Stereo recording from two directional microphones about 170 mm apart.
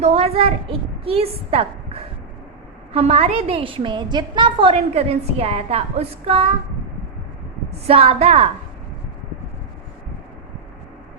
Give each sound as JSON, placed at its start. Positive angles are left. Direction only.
{"t": 0.0, "sound": "a woman's voice", "side_deg": -35}
{"t": 7.9, "sound": "a woman's voice", "side_deg": -35}